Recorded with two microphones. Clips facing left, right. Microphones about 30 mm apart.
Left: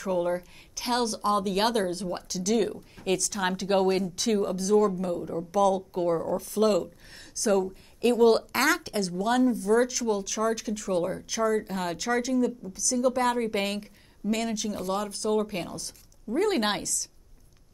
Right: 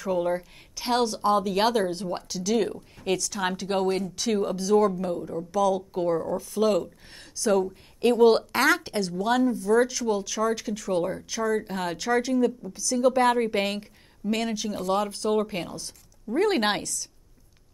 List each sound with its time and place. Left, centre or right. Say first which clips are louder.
0.0 s a woman's voice: right 1 dB; centre
5.2 s a woman's voice: left 1 dB; centre
15.5 s a woman's voice: right 1 dB; centre